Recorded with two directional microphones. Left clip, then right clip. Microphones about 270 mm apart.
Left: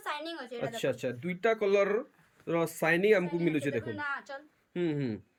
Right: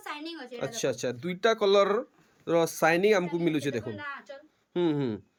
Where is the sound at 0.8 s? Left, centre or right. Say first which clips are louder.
Right 3 dB; centre.